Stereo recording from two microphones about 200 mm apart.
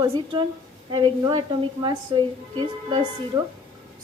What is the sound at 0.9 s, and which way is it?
A woman's voice, 20° right (ahead or behind).